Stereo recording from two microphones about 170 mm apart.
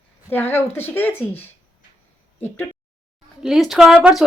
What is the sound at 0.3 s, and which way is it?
Speech, 10° left (ahead or behind).